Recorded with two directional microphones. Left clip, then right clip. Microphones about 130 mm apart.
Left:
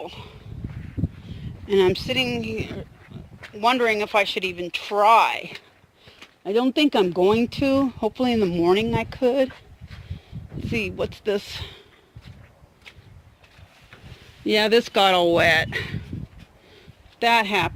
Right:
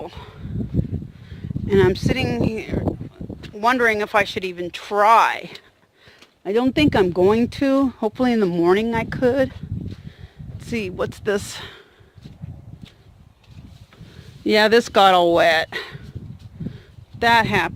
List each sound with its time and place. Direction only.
0.0 s speech: 50° right (ahead or behind)
1.6 s speech: 40° right (ahead or behind)
10.7 s speech: 45° right (ahead or behind)
14.4 s speech: 40° right (ahead or behind); by 16.0 s 20° right (ahead or behind)
16.7 s a sound: 40° right (ahead or behind)